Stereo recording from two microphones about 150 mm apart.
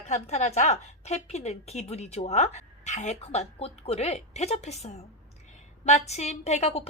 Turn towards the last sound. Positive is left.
turn(degrees=45)  # may be behind; listen again after turning